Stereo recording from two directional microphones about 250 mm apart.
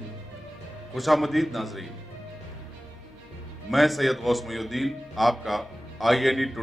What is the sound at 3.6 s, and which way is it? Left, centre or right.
A man's voice, centre.